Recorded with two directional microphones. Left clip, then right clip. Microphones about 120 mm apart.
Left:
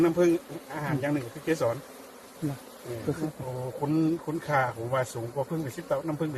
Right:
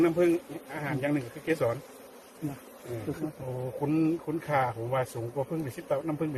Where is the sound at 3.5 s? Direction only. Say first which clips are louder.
Even; centre (ahead or behind).